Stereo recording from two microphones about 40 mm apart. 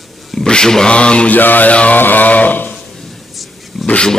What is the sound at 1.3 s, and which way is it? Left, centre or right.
Speech, left.